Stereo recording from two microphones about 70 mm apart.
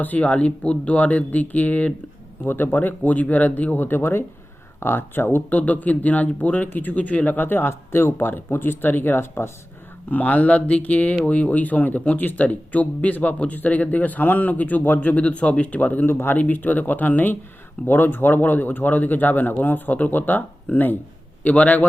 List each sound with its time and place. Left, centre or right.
0.0 s speech: left